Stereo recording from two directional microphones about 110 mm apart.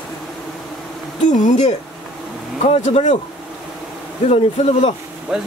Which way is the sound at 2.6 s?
65° left (ahead or behind).